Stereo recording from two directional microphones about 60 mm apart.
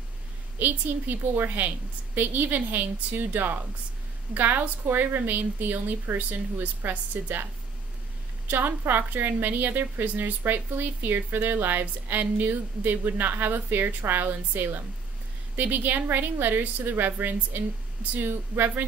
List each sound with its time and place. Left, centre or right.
0.6 s a woman's voice: right
8.5 s a woman's voice: right